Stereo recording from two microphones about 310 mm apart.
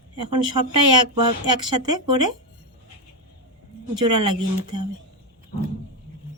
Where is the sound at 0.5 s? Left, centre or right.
Right.